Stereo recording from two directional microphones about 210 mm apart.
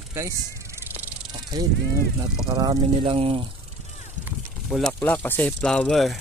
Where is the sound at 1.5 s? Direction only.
20° right (ahead or behind).